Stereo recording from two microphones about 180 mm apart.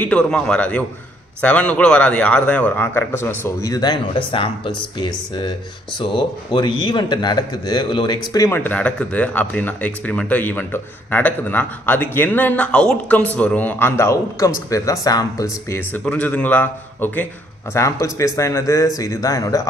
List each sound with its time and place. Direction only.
0.0 s speech: 5° left (ahead or behind)